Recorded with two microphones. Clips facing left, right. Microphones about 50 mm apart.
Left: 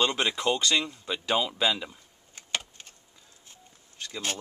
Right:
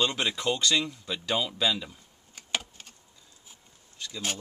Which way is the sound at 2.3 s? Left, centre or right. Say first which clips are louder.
Even; centre.